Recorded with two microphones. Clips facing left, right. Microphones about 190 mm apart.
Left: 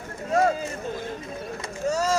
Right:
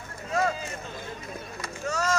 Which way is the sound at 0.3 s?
50° left (ahead or behind).